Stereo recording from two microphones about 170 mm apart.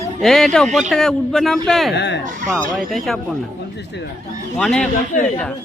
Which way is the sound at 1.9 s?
85° left.